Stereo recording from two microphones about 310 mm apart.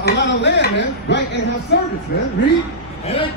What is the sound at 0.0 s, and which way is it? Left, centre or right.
Speech, left.